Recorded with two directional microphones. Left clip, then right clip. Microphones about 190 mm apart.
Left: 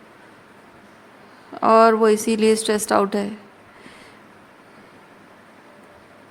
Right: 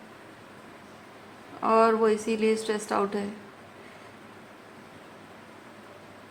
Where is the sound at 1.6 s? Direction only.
50° left (ahead or behind).